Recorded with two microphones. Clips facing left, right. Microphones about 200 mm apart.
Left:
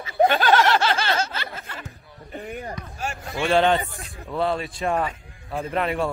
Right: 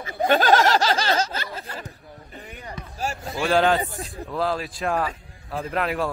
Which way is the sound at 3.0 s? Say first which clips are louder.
Right 5 dB; 40° right (ahead or behind).